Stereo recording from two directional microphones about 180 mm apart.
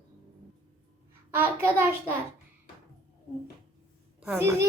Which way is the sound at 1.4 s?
15° right (ahead or behind).